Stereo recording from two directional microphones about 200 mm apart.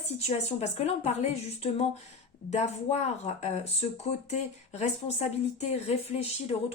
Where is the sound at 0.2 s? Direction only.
30° left (ahead or behind).